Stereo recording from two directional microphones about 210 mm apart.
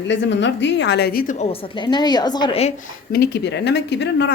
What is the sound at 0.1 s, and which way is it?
A woman's voice, 60° left (ahead or behind).